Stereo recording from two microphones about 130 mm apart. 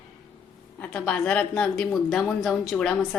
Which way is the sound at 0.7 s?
10° left (ahead or behind).